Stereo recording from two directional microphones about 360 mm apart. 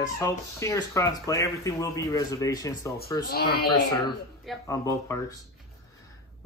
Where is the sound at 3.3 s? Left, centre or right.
Left.